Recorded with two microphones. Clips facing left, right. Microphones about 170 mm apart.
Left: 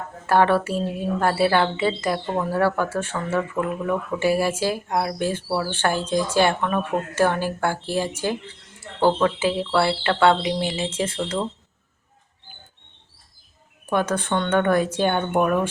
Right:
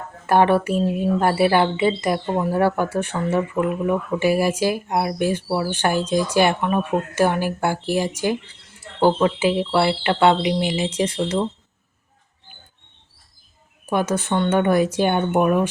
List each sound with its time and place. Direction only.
0.3 s speech: 15° right (ahead or behind)
13.9 s speech: 10° right (ahead or behind)